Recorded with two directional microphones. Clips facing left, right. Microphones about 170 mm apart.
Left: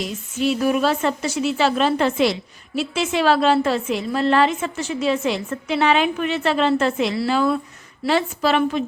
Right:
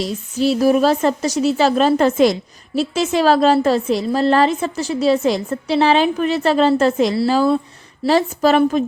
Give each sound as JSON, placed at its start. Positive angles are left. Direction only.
{"t": 0.0, "sound": "speech", "side_deg": -35}